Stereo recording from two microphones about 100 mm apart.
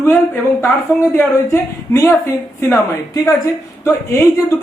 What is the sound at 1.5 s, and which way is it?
Speech, 30° left (ahead or behind).